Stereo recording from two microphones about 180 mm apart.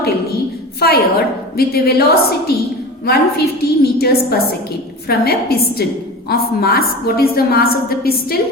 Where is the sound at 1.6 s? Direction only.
60° left (ahead or behind).